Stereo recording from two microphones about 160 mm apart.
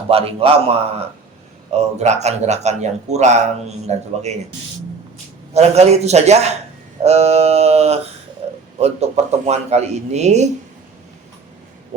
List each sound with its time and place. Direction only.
0.1 s mantra: 35° right (ahead or behind)
1.7 s speech: 45° right (ahead or behind)
5.5 s speech: 45° right (ahead or behind)
7.0 s mantra: 40° right (ahead or behind)
8.4 s a sound: 40° right (ahead or behind)
8.8 s speech: 40° right (ahead or behind)